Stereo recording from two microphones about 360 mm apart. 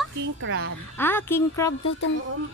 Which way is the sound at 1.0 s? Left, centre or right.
Centre.